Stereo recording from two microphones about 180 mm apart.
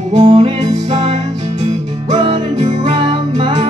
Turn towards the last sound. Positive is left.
turn(degrees=-35)  # may be behind; listen again after turning